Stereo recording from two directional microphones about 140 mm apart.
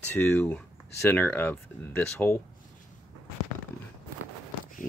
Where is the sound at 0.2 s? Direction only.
15° left (ahead or behind).